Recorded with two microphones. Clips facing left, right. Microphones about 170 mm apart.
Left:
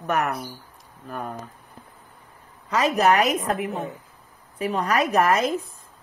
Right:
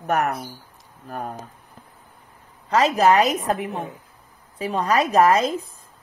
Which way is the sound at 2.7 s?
30° right (ahead or behind).